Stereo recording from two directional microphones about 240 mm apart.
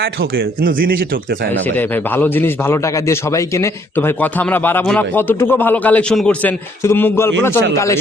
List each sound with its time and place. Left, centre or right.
0.0 s speech: right
1.6 s a man's voice: centre